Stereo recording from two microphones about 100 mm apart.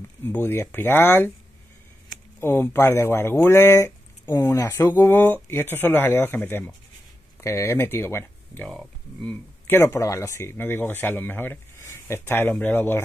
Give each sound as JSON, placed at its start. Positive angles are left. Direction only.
{"t": 0.3, "sound": "speech", "side_deg": 20}
{"t": 2.4, "sound": "speech", "side_deg": 25}
{"t": 8.6, "sound": "speech", "side_deg": 10}
{"t": 9.8, "sound": "speech", "side_deg": 30}